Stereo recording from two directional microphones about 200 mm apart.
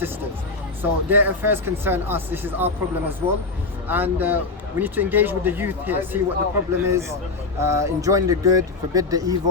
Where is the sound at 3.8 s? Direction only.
10° right (ahead or behind).